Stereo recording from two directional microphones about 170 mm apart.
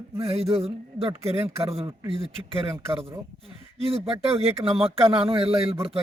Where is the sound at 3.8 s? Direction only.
35° right (ahead or behind).